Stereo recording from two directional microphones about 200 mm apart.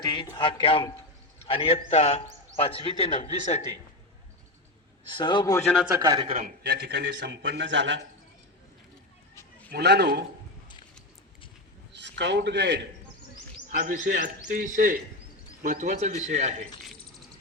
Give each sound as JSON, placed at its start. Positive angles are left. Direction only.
{"t": 0.0, "sound": "a man's voice", "side_deg": 20}
{"t": 5.1, "sound": "a man's voice", "side_deg": 20}
{"t": 6.0, "sound": "speech", "side_deg": -15}
{"t": 6.2, "sound": "a man's voice", "side_deg": -30}
{"t": 6.6, "sound": "a man's voice", "side_deg": -55}
{"t": 7.4, "sound": "a man's voice", "side_deg": -65}
{"t": 9.7, "sound": "a man's voice", "side_deg": -55}
{"t": 11.9, "sound": "a man's voice", "side_deg": -60}
{"t": 13.7, "sound": "a man's voice", "side_deg": -40}